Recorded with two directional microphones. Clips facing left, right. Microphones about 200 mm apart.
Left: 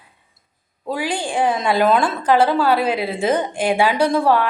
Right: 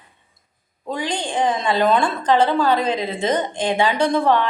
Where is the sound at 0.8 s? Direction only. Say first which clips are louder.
Left 2 dB; 5° left (ahead or behind).